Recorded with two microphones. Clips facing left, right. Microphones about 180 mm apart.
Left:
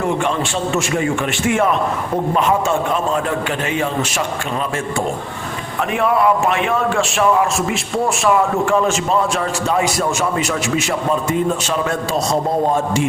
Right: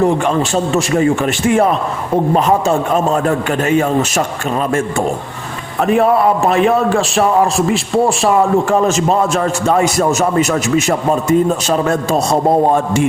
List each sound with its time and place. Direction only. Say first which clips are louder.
0.0 s a man's voice: right 5 dB; 40° right (ahead or behind)
5.8 s a man's voice: right 5 dB; 40° right (ahead or behind); by 13.1 s 55° right (ahead or behind)